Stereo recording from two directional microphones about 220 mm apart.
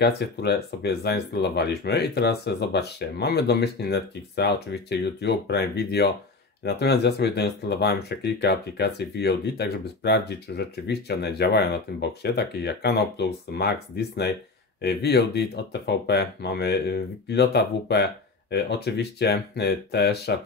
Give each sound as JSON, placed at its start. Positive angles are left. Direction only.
{"t": 0.0, "sound": "speech", "side_deg": 45}